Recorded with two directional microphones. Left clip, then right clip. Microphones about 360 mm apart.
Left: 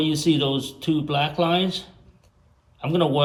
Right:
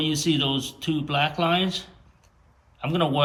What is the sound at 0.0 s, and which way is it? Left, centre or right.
Speech, centre.